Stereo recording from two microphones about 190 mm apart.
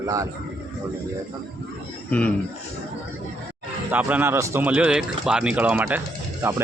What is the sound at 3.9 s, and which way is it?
A man's voice, 10° right (ahead or behind).